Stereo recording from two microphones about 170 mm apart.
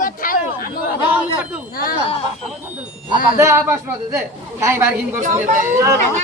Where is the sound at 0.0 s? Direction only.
55° left (ahead or behind).